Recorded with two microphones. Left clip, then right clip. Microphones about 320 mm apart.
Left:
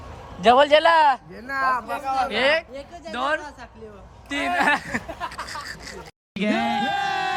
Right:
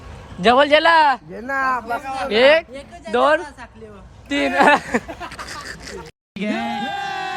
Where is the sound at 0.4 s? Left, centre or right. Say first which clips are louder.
Right 2 dB; centre.